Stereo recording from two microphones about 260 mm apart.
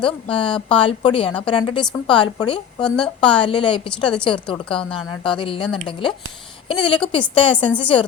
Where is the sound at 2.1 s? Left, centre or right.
Centre.